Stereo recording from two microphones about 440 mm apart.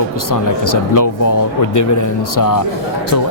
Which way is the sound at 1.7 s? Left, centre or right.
Left.